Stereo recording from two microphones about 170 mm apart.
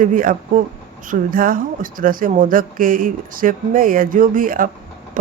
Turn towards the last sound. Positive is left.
turn(degrees=-55)  # may be behind; listen again after turning